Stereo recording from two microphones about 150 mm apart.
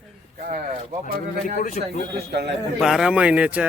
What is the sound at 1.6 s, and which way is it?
Speech, 45° left (ahead or behind).